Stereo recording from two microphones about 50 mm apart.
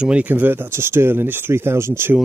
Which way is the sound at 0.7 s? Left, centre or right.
Right.